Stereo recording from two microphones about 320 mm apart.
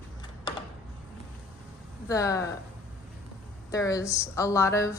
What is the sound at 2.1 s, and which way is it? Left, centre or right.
Speech, centre.